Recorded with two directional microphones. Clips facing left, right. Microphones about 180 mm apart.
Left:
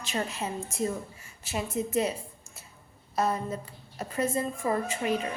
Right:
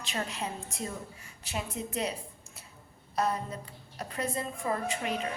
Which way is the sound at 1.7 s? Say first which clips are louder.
Left 7 dB; 45° left (ahead or behind).